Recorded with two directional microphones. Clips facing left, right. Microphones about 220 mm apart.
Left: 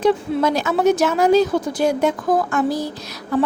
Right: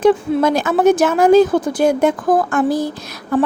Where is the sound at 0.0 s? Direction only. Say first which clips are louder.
Right 4 dB; 50° right (ahead or behind).